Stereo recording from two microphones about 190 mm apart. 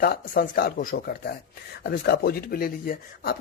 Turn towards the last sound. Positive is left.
turn(degrees=50)  # may be behind; listen again after turning